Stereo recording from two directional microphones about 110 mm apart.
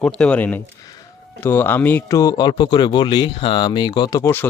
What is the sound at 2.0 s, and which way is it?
Speech, 30° left (ahead or behind).